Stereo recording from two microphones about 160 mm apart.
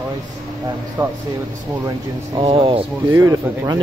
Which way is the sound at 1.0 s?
10° right (ahead or behind).